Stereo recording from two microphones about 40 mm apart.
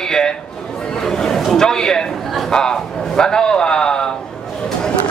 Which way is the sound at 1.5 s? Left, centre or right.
Centre.